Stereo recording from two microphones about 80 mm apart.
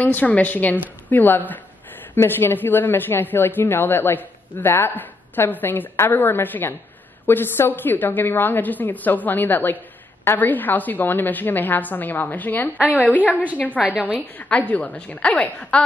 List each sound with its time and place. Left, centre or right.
0.0 s a woman's voice: centre